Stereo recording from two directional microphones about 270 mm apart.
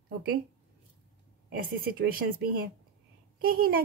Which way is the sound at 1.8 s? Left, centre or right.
Right.